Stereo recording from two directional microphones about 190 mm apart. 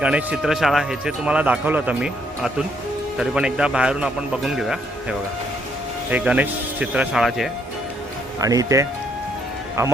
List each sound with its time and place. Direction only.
0.0 s speech: 5° right (ahead or behind)
8.4 s speech: 20° right (ahead or behind)